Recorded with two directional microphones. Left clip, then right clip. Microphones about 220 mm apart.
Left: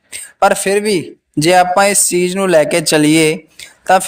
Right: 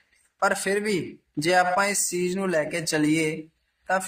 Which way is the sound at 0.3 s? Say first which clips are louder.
Left 12 dB; 35° left (ahead or behind).